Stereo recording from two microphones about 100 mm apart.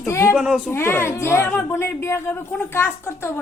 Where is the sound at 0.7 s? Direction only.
25° left (ahead or behind).